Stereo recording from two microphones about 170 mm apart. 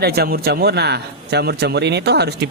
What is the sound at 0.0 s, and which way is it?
Speech, 70° right (ahead or behind).